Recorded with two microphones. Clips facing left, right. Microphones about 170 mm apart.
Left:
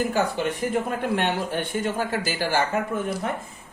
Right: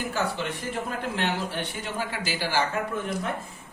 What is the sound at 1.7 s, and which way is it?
Speech, 45° left (ahead or behind).